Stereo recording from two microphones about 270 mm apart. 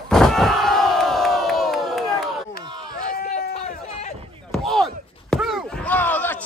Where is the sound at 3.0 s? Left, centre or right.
Left.